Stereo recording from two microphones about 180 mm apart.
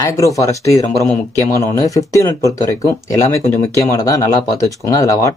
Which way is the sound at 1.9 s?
20° left (ahead or behind).